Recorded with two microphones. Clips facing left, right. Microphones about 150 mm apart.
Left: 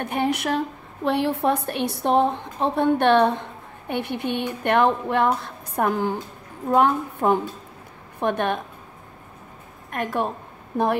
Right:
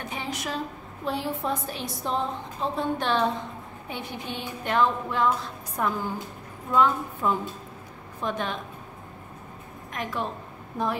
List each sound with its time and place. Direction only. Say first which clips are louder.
0.0 s a woman's voice: left 9 dB; 60° left (ahead or behind)
9.8 s a woman's voice: left 6 dB; 55° left (ahead or behind)